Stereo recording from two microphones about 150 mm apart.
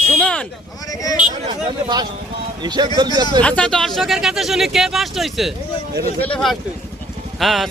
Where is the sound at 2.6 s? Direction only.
30° right (ahead or behind).